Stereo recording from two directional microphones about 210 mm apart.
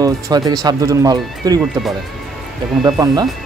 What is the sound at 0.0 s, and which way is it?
Speech, 20° right (ahead or behind).